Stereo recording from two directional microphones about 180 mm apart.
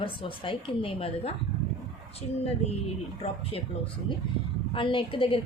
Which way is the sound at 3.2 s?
30° left (ahead or behind).